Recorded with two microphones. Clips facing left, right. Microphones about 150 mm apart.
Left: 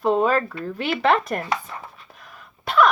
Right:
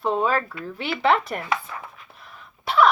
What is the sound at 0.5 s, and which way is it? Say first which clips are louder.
Dishes: left 4 dB; 40° left (ahead or behind).